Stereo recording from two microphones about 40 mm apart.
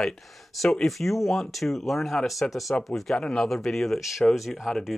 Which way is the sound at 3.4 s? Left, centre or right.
Centre.